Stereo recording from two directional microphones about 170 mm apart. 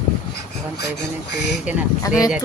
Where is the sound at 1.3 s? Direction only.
90° left.